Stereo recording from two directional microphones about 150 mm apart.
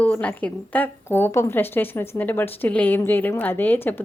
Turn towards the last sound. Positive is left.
turn(degrees=15)  # may be behind; listen again after turning